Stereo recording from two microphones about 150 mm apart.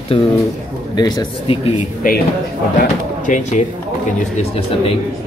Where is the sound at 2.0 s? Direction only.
65° left (ahead or behind).